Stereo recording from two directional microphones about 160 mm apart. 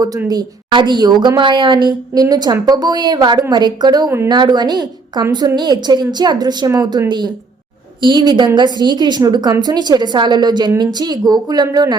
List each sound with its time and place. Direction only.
0.3 s a woman's voice: 25° right (ahead or behind)